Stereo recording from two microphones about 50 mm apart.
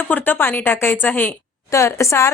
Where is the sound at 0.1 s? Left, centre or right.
Left.